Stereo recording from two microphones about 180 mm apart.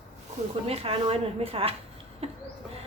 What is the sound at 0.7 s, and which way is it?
Speech, 30° right (ahead or behind).